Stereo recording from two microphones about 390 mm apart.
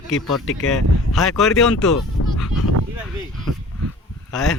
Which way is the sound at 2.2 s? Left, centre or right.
Left.